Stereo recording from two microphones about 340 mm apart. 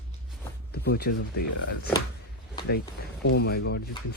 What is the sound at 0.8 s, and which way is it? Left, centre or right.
Speech, left.